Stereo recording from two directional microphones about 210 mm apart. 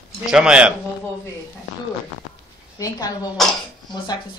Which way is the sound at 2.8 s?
20° left (ahead or behind).